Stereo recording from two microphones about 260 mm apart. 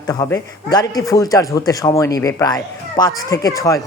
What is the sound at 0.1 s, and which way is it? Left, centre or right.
A woman's voice, centre.